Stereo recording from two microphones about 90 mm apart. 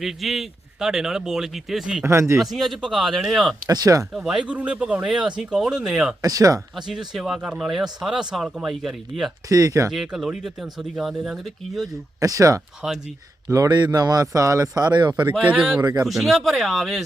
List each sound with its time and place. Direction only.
0.0 s speech: centre (ahead or behind)
2.0 s speech: 30° right (ahead or behind)
2.4 s speech: centre (ahead or behind)
3.7 s speech: 40° right (ahead or behind)
4.1 s speech: 5° right (ahead or behind)
6.2 s speech: 40° right (ahead or behind)
6.7 s speech: 5° right (ahead or behind)
9.5 s speech: 40° right (ahead or behind)
9.9 s speech: 5° right (ahead or behind)
12.2 s speech: 40° right (ahead or behind)
15.1 s speech: 15° right (ahead or behind)
15.8 s speech: 45° right (ahead or behind)
16.0 s speech: centre (ahead or behind)